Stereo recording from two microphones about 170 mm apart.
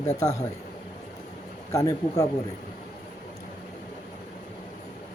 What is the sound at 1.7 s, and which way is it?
Speech, 20° left (ahead or behind).